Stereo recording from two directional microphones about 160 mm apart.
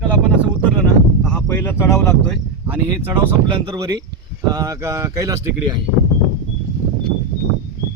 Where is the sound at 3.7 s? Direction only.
20° right (ahead or behind).